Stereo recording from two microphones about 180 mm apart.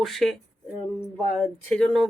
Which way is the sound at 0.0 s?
Centre (ahead or behind).